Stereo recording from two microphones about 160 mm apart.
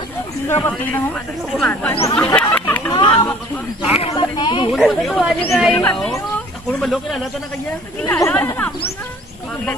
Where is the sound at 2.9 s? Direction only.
30° left (ahead or behind).